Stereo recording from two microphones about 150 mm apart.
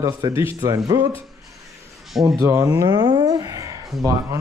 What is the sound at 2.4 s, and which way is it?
Speech, 20° right (ahead or behind).